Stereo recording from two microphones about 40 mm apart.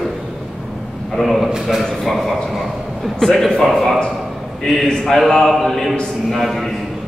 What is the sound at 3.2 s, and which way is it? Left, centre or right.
A man's voice, centre.